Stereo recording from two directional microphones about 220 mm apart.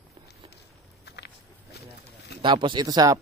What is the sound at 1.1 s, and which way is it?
Walk, 50° left (ahead or behind).